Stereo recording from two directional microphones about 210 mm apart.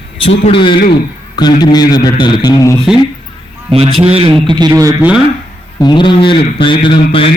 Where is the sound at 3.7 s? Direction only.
25° right (ahead or behind); by 5.2 s 5° right (ahead or behind).